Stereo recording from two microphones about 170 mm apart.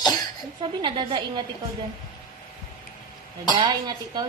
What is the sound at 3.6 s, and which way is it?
Speech, 25° right (ahead or behind).